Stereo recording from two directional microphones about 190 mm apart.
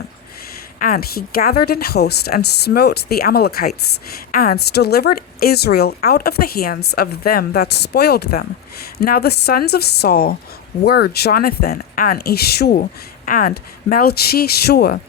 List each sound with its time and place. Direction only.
0.8 s a woman's voice: 50° left (ahead or behind)
12.7 s speech: 45° left (ahead or behind)